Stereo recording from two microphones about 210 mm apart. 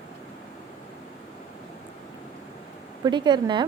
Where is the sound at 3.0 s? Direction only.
20° right (ahead or behind).